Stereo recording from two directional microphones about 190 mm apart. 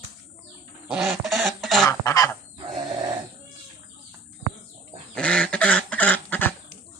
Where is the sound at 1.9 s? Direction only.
15° left (ahead or behind).